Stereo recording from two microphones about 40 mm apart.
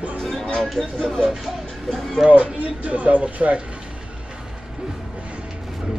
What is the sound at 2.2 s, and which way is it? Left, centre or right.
Speech, right.